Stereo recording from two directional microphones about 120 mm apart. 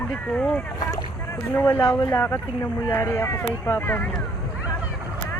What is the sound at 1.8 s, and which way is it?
Speech, 30° left (ahead or behind).